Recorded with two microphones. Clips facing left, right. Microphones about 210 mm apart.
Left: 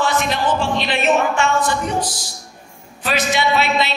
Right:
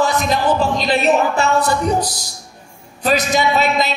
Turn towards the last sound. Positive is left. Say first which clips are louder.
# right 1 dB
turn(degrees=-40)  # may be behind; listen again after turning